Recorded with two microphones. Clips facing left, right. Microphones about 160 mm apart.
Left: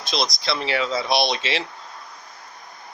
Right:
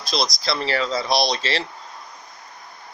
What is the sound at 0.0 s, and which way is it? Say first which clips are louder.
Speech: right 1 dB; centre (ahead or behind).